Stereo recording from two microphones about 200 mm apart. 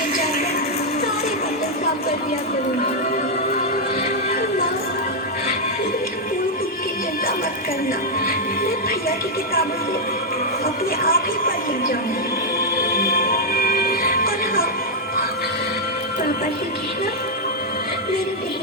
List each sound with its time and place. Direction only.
8.6 s music: 45° left (ahead or behind)
11.0 s speech: 45° left (ahead or behind)
12.5 s music: 45° left (ahead or behind)